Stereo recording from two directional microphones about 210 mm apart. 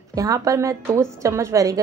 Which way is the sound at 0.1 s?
15° right (ahead or behind).